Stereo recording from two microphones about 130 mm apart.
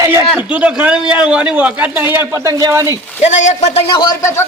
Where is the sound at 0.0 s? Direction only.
25° right (ahead or behind).